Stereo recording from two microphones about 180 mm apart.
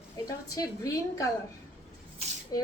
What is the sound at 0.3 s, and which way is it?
A woman's voice, 20° left (ahead or behind).